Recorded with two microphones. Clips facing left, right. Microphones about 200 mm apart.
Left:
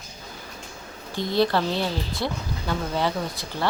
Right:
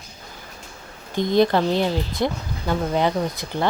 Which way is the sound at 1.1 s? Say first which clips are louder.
Right 4 dB; 20° right (ahead or behind).